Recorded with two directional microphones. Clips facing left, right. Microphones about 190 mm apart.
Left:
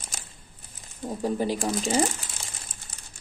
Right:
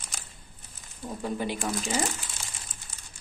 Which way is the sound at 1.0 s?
35° left (ahead or behind).